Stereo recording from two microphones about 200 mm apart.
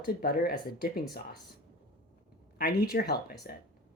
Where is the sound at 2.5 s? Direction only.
50° left (ahead or behind).